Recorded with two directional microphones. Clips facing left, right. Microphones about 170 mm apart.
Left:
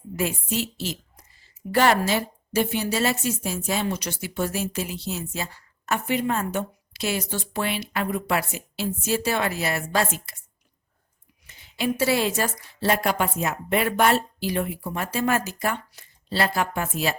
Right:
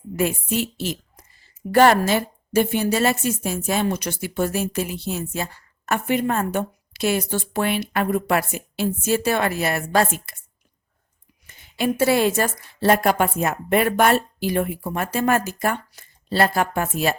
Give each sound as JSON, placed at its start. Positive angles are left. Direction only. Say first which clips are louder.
{"t": 0.2, "sound": "a woman's voice", "louder": "right 4 dB", "side_deg": -55}
{"t": 11.4, "sound": "a woman's voice", "louder": "right 3 dB", "side_deg": -50}